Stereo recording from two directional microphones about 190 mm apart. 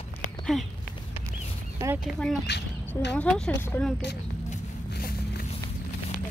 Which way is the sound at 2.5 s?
60° left (ahead or behind).